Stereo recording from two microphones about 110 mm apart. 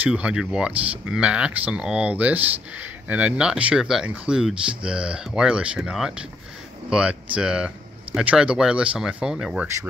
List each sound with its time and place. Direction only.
0.0 s speech: 10° right (ahead or behind)